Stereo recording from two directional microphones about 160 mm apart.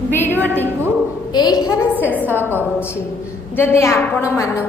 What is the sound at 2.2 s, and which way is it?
Speech, 10° right (ahead or behind).